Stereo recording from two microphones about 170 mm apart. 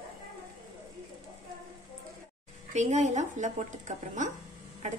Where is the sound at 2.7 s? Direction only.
45° right (ahead or behind).